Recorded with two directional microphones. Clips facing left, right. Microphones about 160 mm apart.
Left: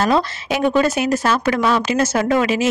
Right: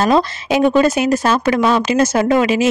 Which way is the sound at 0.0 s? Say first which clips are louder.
Right 3 dB; 20° right (ahead or behind).